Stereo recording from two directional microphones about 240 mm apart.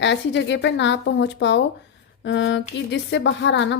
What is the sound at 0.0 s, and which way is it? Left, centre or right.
Speech, left.